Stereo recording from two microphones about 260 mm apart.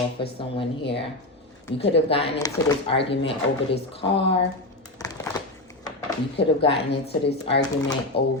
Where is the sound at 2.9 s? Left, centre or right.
Left.